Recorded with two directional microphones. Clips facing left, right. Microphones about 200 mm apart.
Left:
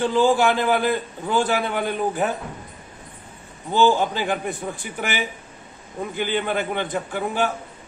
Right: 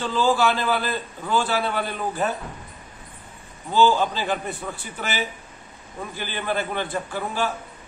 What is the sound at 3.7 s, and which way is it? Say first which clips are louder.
A man's voice: left 1 dB; 20° left (ahead or behind).